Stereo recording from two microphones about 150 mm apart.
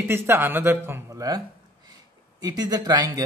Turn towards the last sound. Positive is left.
turn(degrees=-25)  # may be behind; listen again after turning